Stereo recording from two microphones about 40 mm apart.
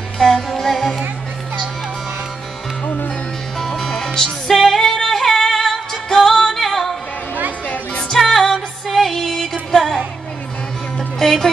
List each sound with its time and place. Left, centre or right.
0.2 s music: centre
3.5 s music: centre
7.6 s music: left
8.1 s music: centre